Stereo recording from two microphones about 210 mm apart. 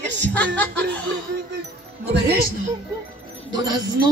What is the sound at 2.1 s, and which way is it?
Speech, 55° right (ahead or behind).